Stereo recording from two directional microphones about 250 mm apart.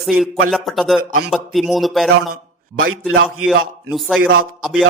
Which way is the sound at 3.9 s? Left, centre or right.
Centre.